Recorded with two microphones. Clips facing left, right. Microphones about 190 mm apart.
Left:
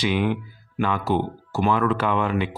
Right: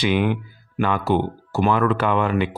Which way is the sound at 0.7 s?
60° right (ahead or behind).